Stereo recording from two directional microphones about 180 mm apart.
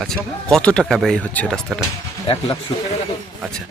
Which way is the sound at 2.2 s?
20° left (ahead or behind).